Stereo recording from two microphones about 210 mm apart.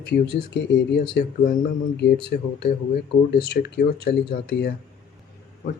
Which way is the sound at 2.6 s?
50° left (ahead or behind).